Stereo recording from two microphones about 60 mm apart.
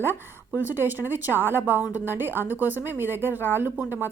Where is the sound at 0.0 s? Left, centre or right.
Right.